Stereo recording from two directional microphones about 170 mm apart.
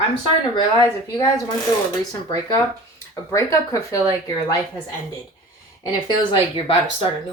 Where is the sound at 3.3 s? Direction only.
20° left (ahead or behind).